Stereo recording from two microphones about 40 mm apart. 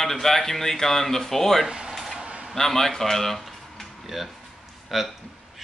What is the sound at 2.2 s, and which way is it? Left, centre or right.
Vehicle, right.